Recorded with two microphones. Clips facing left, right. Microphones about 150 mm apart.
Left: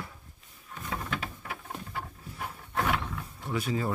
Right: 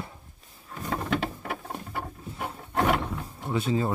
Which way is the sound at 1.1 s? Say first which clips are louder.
Right 8 dB; 60° right (ahead or behind).